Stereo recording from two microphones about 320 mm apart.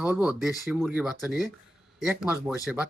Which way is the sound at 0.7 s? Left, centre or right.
Centre.